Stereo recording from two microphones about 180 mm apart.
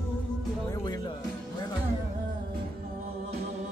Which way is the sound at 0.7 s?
20° left (ahead or behind).